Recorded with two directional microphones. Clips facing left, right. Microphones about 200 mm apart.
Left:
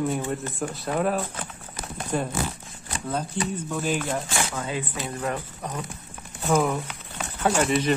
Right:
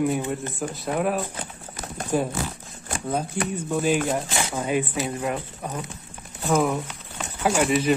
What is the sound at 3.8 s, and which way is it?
Speech, 45° right (ahead or behind).